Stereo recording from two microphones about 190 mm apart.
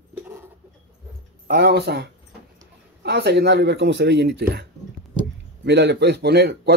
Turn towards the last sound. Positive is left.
turn(degrees=-60)  # may be behind; listen again after turning